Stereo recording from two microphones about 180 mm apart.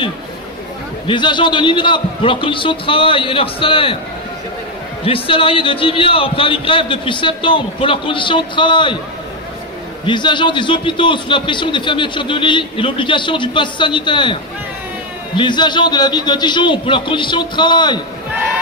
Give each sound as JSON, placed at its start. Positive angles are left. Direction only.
{"t": 1.0, "sound": "a man's voice", "side_deg": 25}
{"t": 5.0, "sound": "a man's voice", "side_deg": 30}
{"t": 10.0, "sound": "a man's voice", "side_deg": 25}